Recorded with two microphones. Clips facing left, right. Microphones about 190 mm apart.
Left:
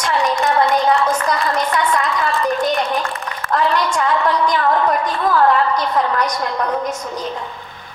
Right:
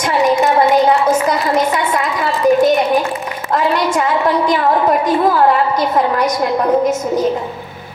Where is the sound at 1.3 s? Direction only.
20° right (ahead or behind).